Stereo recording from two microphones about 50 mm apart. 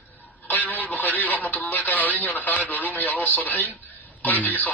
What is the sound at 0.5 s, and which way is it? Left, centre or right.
Speech, left.